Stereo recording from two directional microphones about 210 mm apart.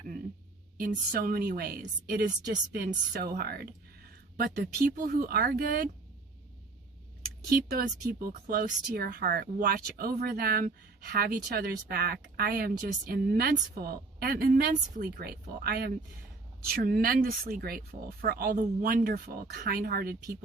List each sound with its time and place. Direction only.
0.8 s speech: 45° right (ahead or behind)
7.2 s speech: 45° right (ahead or behind)